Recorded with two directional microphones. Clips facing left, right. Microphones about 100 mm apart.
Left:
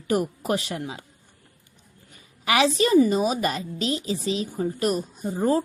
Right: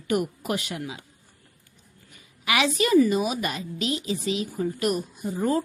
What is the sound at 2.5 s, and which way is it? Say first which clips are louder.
A woman's voice: left 2 dB; 35° left (ahead or behind).